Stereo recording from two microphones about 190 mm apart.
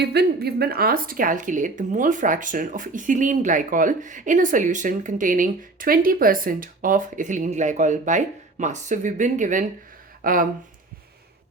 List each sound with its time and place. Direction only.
0.0 s speech: 60° right (ahead or behind)